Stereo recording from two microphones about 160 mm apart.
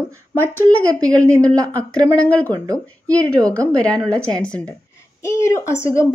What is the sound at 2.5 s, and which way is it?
Speech, 20° right (ahead or behind).